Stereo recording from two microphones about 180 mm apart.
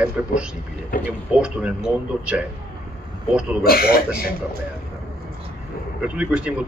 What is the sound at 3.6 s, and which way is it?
Speech, 55° left (ahead or behind).